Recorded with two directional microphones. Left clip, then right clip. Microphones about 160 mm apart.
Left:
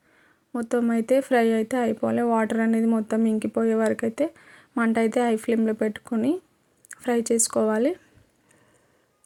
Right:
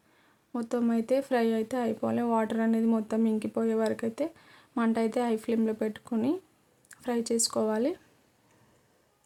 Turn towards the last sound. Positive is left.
turn(degrees=20)  # may be behind; listen again after turning